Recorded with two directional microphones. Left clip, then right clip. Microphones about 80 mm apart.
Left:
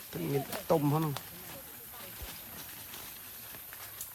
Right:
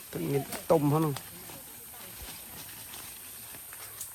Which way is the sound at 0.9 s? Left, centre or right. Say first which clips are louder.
Right 4 dB; centre.